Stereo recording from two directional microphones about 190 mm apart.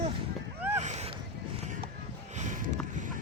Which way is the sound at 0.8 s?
35° right (ahead or behind).